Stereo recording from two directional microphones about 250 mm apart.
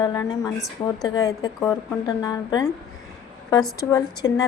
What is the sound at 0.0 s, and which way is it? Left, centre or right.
A woman's voice, centre.